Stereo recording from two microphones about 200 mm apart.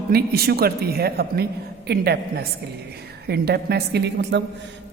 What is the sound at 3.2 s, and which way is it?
A woman's voice, 55° right (ahead or behind).